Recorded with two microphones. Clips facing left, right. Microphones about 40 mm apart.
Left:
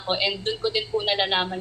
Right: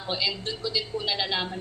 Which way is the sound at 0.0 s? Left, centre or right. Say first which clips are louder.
Left 4 dB; left.